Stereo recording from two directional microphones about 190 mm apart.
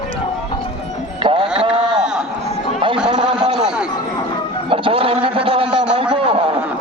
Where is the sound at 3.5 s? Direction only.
5° right (ahead or behind).